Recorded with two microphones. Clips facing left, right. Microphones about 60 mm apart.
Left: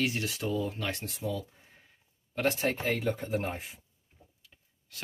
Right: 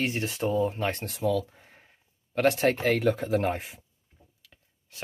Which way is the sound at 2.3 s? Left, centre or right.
Right.